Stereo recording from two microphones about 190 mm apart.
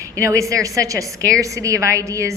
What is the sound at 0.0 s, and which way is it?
A woman's voice, 15° right (ahead or behind).